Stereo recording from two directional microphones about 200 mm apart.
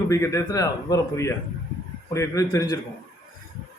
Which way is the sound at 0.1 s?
15° left (ahead or behind).